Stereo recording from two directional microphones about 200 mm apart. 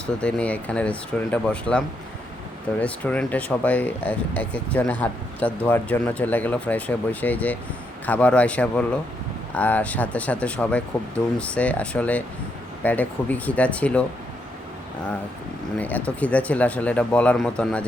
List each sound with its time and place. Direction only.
0.2 s speech: 5° left (ahead or behind)
2.8 s speech: 5° left (ahead or behind)
15.8 s speech: 10° left (ahead or behind)